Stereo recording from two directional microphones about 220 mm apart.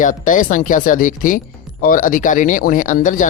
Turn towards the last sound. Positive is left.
turn(degrees=35)  # may be behind; listen again after turning